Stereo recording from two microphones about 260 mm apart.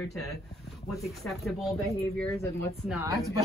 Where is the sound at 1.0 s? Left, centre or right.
Centre.